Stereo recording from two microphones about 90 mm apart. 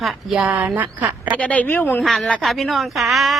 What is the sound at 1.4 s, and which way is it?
Speech, 15° left (ahead or behind).